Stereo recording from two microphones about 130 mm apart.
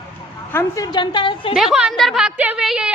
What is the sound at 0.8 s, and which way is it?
Speech, 35° left (ahead or behind).